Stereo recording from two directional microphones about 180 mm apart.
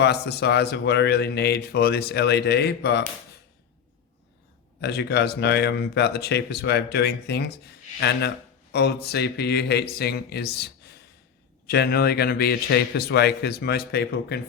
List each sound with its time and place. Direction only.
0.0 s speech: 65° left (ahead or behind)
4.8 s speech: 65° left (ahead or behind)
11.7 s speech: 60° left (ahead or behind)